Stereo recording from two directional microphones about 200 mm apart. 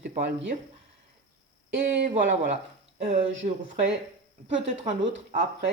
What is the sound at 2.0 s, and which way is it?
Speech, 40° right (ahead or behind).